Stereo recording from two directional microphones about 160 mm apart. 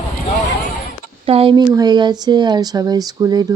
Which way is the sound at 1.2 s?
35° right (ahead or behind).